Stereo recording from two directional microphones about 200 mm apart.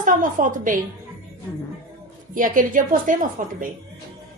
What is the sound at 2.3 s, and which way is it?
A woman's voice, 40° right (ahead or behind).